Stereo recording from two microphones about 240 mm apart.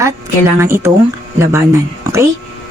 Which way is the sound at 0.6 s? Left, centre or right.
Centre.